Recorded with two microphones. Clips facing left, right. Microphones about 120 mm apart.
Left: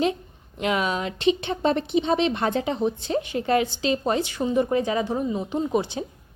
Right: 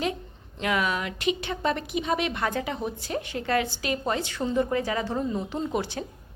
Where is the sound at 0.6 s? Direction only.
20° left (ahead or behind).